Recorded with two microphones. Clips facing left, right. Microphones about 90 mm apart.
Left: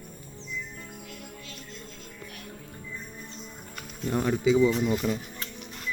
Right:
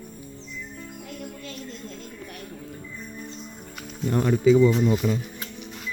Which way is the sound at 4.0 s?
Centre (ahead or behind).